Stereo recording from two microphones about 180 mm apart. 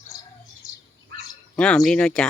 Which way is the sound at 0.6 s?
20° left (ahead or behind).